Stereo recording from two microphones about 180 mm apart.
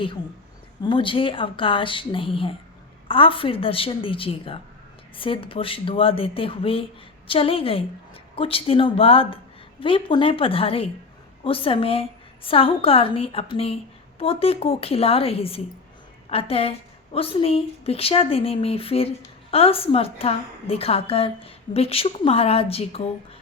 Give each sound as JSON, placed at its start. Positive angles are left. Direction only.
{"t": 0.8, "sound": "a woman's voice", "side_deg": 25}